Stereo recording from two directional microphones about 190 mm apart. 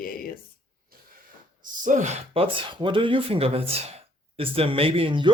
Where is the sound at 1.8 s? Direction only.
40° right (ahead or behind).